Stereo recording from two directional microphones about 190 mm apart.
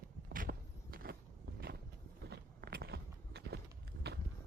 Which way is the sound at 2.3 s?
55° right (ahead or behind).